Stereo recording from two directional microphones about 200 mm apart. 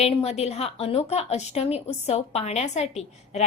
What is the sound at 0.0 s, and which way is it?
A woman's voice, 30° left (ahead or behind).